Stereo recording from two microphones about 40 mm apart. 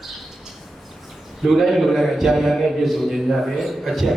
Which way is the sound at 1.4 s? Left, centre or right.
Centre.